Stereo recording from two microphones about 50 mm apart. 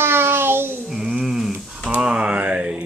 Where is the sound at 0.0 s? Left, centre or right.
Right.